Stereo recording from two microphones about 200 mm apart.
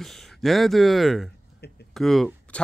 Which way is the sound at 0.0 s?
Centre (ahead or behind).